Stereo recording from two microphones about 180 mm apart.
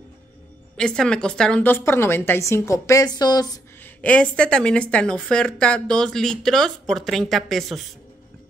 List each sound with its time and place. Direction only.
0.7 s a woman's voice: 5° left (ahead or behind); by 3.9 s 20° left (ahead or behind)
4.0 s speech: 5° left (ahead or behind)